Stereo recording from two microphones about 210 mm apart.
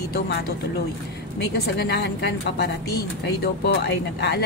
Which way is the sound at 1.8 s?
55° left (ahead or behind).